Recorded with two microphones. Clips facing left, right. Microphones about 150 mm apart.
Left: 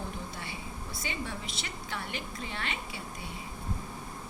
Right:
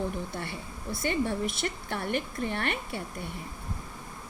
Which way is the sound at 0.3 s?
55° right (ahead or behind).